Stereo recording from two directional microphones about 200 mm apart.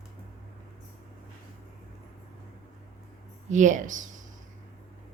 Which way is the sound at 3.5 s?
40° right (ahead or behind).